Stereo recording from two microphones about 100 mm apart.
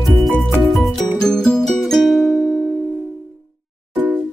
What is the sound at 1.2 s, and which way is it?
Music, 5° left (ahead or behind).